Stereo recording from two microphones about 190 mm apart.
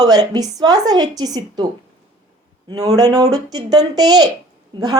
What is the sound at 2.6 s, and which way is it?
A woman's voice, 20° right (ahead or behind).